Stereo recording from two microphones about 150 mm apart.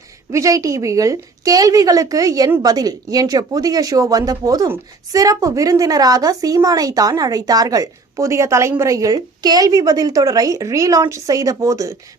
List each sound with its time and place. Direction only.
0.3 s speech: 20° right (ahead or behind)